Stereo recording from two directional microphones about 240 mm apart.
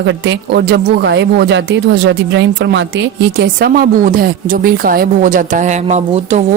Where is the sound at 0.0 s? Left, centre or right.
Right.